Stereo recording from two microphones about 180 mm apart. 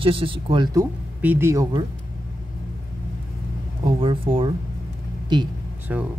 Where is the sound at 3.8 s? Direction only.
30° right (ahead or behind).